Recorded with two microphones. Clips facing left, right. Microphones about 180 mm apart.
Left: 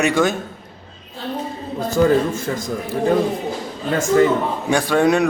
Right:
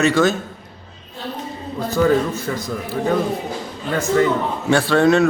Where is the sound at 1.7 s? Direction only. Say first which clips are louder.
Left 1 dB; 45° left (ahead or behind).